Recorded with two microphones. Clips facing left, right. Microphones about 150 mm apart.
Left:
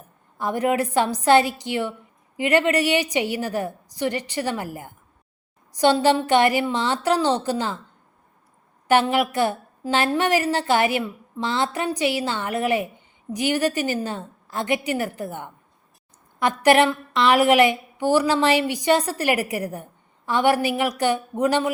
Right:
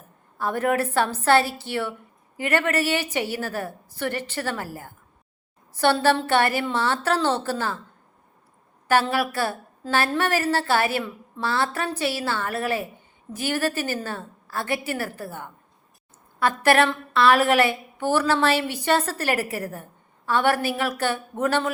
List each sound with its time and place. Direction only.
0.3 s a woman's voice: 15° left (ahead or behind)
8.9 s a woman's voice: 20° left (ahead or behind)